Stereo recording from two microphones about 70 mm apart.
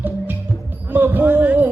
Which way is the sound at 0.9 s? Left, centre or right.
Right.